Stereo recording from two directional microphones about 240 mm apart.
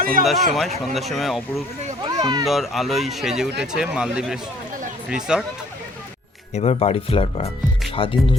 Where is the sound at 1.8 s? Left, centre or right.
Centre.